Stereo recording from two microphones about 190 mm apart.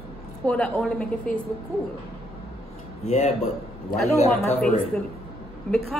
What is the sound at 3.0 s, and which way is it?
Speech, 35° left (ahead or behind).